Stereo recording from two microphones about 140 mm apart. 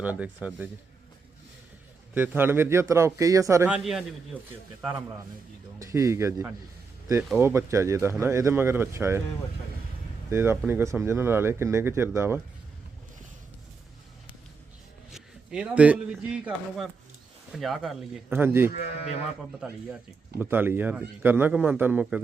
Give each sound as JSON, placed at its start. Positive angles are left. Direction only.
{"t": 0.0, "sound": "speech", "side_deg": -10}
{"t": 2.1, "sound": "speech", "side_deg": -15}
{"t": 3.7, "sound": "speech", "side_deg": 0}
{"t": 5.8, "sound": "speech", "side_deg": -20}
{"t": 10.2, "sound": "speech", "side_deg": -20}
{"t": 15.1, "sound": "a man's voice", "side_deg": -5}
{"t": 18.3, "sound": "speech", "side_deg": -15}
{"t": 18.7, "sound": "speech", "side_deg": 50}
{"t": 19.5, "sound": "speech", "side_deg": -5}